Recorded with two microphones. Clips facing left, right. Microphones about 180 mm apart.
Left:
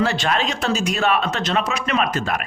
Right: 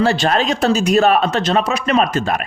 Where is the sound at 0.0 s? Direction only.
35° right (ahead or behind).